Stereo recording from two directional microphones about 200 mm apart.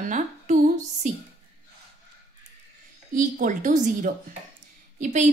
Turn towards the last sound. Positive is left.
turn(degrees=-35)  # may be behind; listen again after turning